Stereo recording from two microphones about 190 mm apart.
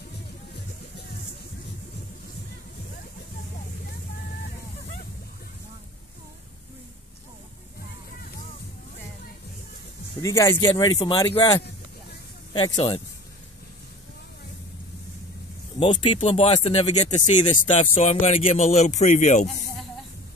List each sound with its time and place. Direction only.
10.2 s speech: 15° left (ahead or behind)
12.5 s speech: 25° left (ahead or behind)
15.8 s speech: 30° left (ahead or behind)